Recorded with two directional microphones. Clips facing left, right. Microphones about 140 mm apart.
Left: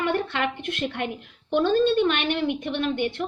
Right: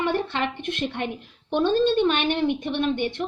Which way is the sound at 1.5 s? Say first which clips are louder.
Even; 20° right (ahead or behind).